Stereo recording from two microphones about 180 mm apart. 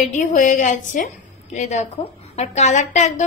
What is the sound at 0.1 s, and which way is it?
A woman's voice, 45° left (ahead or behind).